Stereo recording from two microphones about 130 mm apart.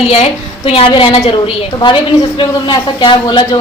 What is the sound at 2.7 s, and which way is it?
Speech, 40° left (ahead or behind).